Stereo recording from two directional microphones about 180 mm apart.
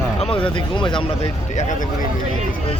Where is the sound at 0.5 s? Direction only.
25° left (ahead or behind).